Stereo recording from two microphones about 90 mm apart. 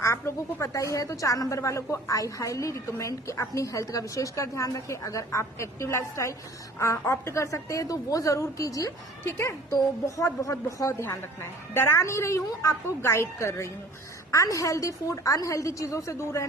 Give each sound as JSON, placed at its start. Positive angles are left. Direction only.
{"t": 0.0, "sound": "a woman's voice", "side_deg": 30}